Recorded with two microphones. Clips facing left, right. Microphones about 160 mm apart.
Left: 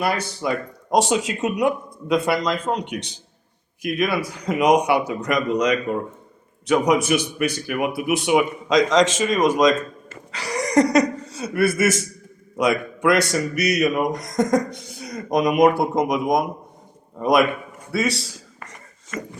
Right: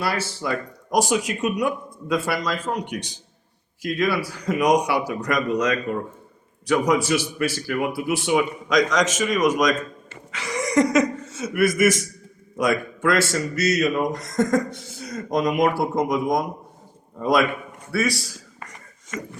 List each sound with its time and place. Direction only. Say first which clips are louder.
0.0 s speech: left 3 dB; 20° left (ahead or behind)
10.3 s chuckle: left 2 dB; 35° left (ahead or behind)
12.5 s a man's voice: left 2 dB; 20° left (ahead or behind)